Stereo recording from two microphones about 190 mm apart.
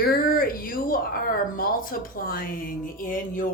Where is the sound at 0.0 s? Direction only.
50° left (ahead or behind).